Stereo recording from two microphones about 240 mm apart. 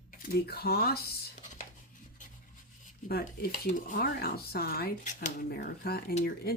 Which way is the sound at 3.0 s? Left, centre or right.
Left.